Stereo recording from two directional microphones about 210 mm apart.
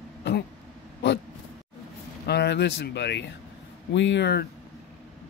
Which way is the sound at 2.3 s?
50° left (ahead or behind).